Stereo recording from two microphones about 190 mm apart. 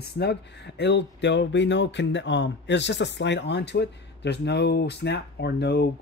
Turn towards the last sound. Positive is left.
turn(degrees=60)  # may be behind; listen again after turning